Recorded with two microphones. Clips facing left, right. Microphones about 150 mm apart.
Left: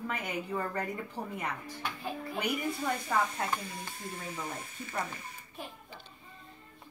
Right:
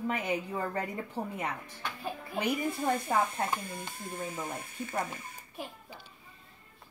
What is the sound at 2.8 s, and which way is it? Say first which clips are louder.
Speech: right 3 dB; 45° right (ahead or behind).